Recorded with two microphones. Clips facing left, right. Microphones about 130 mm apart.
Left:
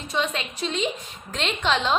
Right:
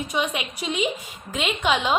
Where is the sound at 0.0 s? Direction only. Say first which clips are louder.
Right 1 dB; 10° right (ahead or behind).